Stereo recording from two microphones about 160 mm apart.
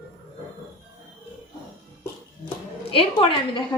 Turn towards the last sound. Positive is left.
turn(degrees=30)  # may be behind; listen again after turning